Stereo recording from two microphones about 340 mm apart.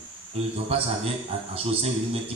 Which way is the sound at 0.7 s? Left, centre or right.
Centre.